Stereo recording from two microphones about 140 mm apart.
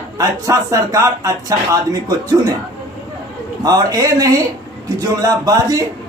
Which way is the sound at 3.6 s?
25° right (ahead or behind).